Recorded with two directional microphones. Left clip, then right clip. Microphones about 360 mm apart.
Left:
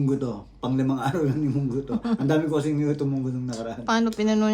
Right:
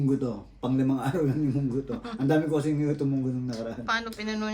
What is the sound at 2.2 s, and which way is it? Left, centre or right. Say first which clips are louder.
A man's voice: left 1 dB; centre.